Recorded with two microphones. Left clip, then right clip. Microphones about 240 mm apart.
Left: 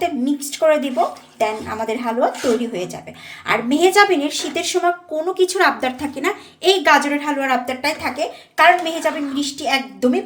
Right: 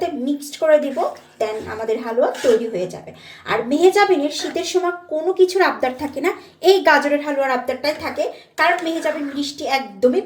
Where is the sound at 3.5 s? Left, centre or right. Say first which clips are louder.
Even; left.